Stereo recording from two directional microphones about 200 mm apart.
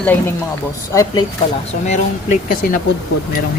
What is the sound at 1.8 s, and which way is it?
Speech, 35° left (ahead or behind).